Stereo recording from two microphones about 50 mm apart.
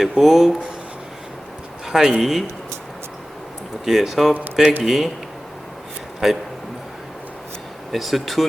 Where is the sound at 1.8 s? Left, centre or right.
Centre.